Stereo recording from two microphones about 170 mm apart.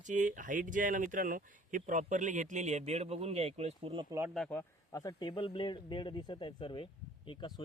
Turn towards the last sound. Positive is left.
turn(degrees=25)  # may be behind; listen again after turning